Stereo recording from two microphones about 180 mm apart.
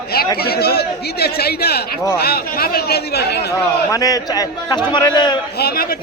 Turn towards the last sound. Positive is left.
turn(degrees=55)  # may be behind; listen again after turning